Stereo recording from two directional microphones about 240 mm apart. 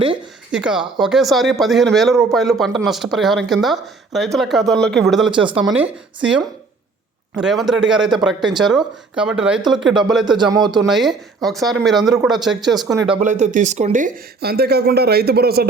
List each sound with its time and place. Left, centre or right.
0.5 s speech: centre
7.3 s speech: centre
10.3 s a man's voice: centre
10.8 s speech: centre
13.1 s speech: right